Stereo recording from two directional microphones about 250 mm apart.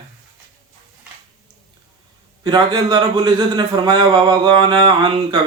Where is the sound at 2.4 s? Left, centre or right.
Centre.